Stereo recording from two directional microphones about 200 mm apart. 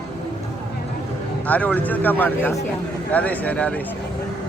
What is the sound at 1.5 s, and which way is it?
Speech, 10° left (ahead or behind).